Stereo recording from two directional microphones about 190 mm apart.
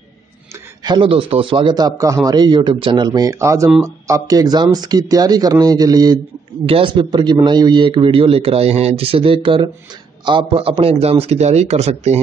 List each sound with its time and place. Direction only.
0.8 s a man's voice: 25° right (ahead or behind)